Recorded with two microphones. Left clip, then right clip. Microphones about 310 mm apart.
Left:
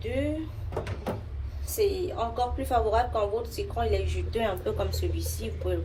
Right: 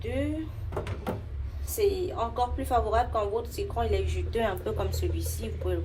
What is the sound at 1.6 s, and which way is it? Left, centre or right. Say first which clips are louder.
A woman's voice: even; centre.